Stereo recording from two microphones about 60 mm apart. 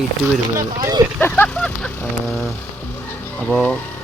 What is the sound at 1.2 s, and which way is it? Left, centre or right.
Speech, left.